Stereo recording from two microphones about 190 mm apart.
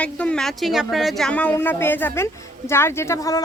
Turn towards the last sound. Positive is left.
turn(degrees=20)  # may be behind; listen again after turning